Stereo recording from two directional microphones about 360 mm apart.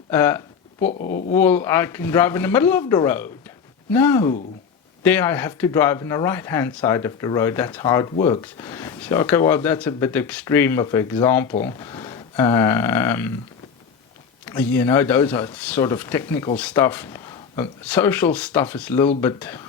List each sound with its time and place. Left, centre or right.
0.1 s a sound: centre
0.9 s speech: left
1.3 s speech: centre
14.4 s speech: centre